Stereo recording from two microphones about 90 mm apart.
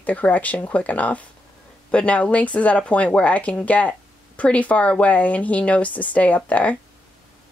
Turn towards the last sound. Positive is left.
turn(degrees=15)  # may be behind; listen again after turning